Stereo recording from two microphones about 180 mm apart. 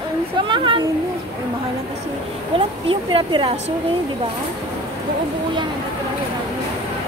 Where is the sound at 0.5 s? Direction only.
25° right (ahead or behind).